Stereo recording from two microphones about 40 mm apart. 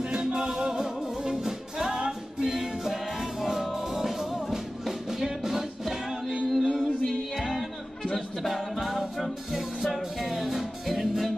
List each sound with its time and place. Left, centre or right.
0.1 s music: centre
8.5 s music: centre